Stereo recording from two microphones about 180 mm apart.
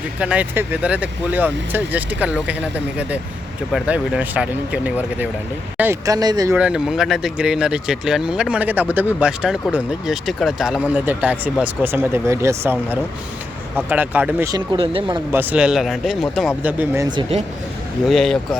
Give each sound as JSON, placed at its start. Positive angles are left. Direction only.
{"t": 0.2, "sound": "speech", "side_deg": -5}
{"t": 6.6, "sound": "speech", "side_deg": -5}
{"t": 15.3, "sound": "speech", "side_deg": -10}
{"t": 16.6, "sound": "speech", "side_deg": -15}
{"t": 17.1, "sound": "speech", "side_deg": -30}
{"t": 18.0, "sound": "speech", "side_deg": 0}